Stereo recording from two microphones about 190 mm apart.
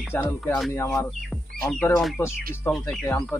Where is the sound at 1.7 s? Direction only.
Centre (ahead or behind).